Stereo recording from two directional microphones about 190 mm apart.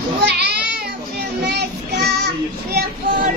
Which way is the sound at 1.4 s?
60° right (ahead or behind).